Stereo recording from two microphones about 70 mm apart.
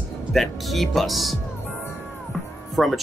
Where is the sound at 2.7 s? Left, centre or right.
Centre.